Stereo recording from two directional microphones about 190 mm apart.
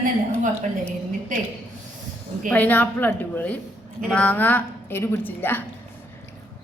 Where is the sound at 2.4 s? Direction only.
10° left (ahead or behind).